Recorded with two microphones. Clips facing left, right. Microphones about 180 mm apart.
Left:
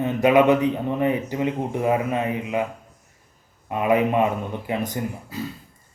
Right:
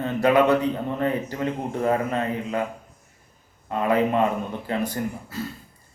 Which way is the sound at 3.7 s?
15° left (ahead or behind).